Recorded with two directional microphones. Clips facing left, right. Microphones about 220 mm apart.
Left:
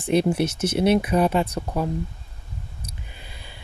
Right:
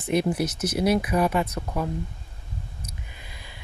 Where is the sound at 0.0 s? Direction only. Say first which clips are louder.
Left 3 dB; 30° left (ahead or behind).